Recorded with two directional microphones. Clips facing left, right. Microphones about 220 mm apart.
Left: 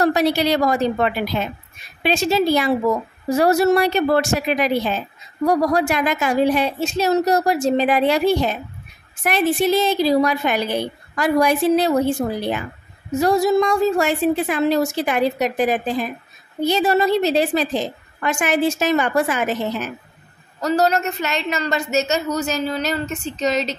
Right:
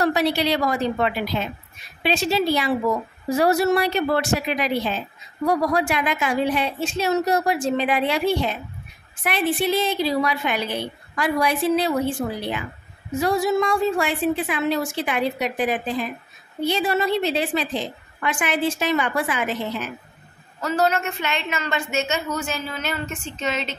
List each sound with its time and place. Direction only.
0.0 s a woman's voice: 45° left (ahead or behind)
20.6 s a woman's voice: 40° left (ahead or behind)